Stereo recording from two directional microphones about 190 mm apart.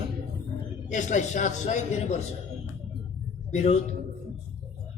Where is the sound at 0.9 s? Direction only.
40° left (ahead or behind).